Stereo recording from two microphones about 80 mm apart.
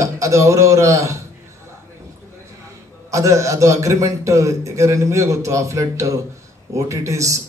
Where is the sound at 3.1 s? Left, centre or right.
Right.